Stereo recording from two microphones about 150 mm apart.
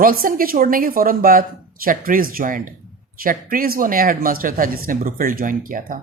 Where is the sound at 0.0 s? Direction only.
75° right (ahead or behind).